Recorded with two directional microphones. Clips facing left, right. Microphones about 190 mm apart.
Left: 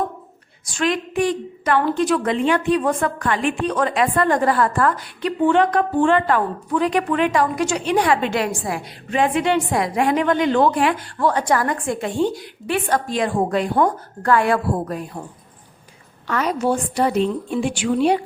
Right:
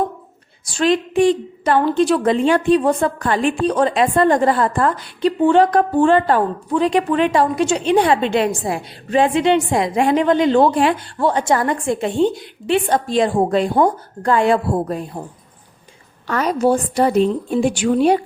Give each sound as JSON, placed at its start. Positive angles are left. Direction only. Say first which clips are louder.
{"t": 0.6, "sound": "a woman's voice", "louder": "right 5 dB", "side_deg": -30}
{"t": 13.7, "sound": "a woman's voice", "louder": "right 3 dB", "side_deg": -15}
{"t": 16.2, "sound": "a woman's voice", "louder": "right 4 dB", "side_deg": -40}